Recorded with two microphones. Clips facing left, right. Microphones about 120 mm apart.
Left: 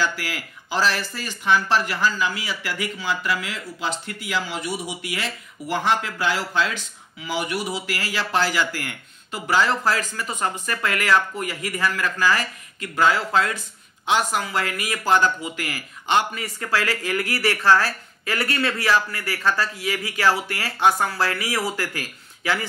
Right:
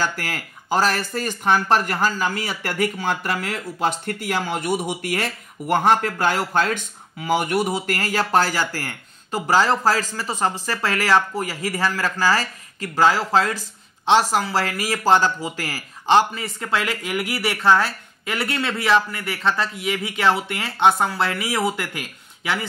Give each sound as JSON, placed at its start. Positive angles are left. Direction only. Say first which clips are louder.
{"t": 0.0, "sound": "speech", "louder": "even", "side_deg": -45}